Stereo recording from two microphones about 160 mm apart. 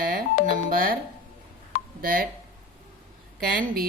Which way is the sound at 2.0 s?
65° right (ahead or behind).